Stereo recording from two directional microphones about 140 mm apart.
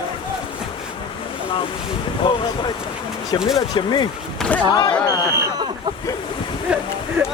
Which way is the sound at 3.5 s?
30° left (ahead or behind).